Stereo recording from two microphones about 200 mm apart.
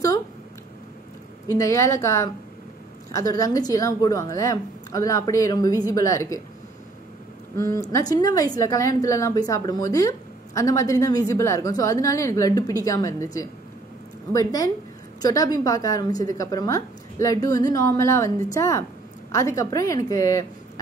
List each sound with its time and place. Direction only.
1.6 s a woman's voice: 15° left (ahead or behind)
7.5 s a woman's voice: 15° left (ahead or behind)